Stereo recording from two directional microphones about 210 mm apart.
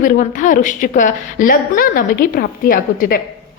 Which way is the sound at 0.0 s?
40° left (ahead or behind).